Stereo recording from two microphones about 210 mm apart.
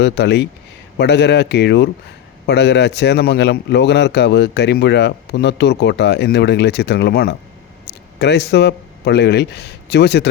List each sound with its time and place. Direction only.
0.0 s a man's voice: 55° left (ahead or behind)